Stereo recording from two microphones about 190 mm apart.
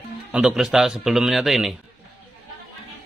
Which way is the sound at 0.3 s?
5° right (ahead or behind).